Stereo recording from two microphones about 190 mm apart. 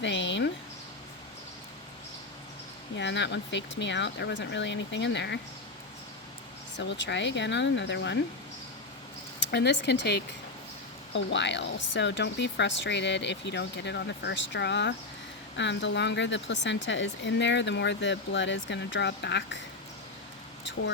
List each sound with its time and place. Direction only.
0.0 s a sound: 70° left (ahead or behind)
2.9 s speech: 70° left (ahead or behind)
6.7 s speech: 70° left (ahead or behind)
9.4 s speech: 65° left (ahead or behind)